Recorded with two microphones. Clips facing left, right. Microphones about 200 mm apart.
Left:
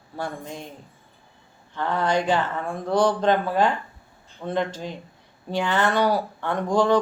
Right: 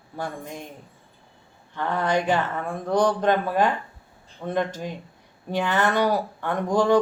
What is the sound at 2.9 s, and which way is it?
Speech, 15° right (ahead or behind).